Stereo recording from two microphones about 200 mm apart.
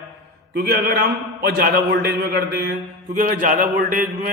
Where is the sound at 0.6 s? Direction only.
55° right (ahead or behind).